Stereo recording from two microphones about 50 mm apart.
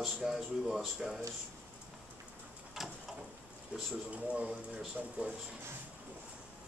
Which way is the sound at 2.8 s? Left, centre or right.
Centre.